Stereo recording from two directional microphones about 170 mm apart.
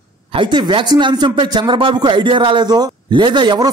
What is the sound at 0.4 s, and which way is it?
Speech, 25° right (ahead or behind).